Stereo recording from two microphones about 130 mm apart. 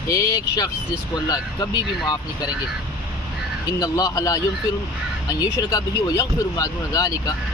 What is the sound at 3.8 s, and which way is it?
Speech, 25° left (ahead or behind).